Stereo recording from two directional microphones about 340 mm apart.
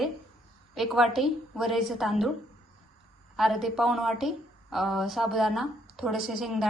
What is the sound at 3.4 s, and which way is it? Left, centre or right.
A woman's voice, centre.